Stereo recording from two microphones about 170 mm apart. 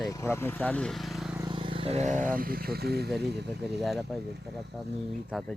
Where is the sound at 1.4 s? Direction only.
30° right (ahead or behind); by 3.5 s 80° right.